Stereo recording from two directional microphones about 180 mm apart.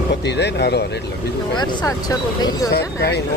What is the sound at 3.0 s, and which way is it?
Speech, 65° left (ahead or behind).